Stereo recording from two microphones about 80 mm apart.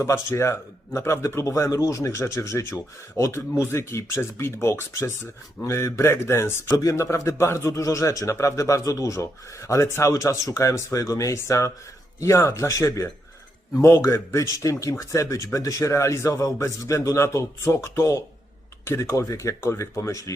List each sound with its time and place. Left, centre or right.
0.0 s a man's voice: left